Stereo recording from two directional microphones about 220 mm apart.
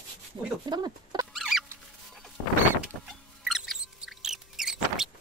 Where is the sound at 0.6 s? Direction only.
20° right (ahead or behind).